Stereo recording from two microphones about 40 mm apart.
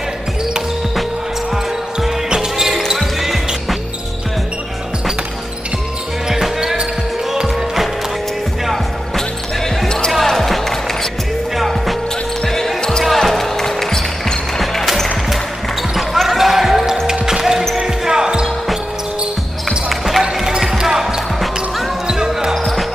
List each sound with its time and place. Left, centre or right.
2.0 s music: centre
3.0 s basketball bounce: centre
6.2 s basketball bounce: centre
7.4 s music: centre
9.8 s basketball bounce: centre
10.2 s music: centre
12.4 s basketball bounce: centre
14.6 s music: centre
15.9 s basketball bounce: centre
19.9 s basketball bounce: centre
20.4 s basketball bounce: centre